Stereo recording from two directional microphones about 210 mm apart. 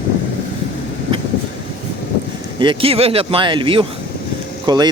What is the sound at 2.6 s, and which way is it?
Speech, 25° right (ahead or behind).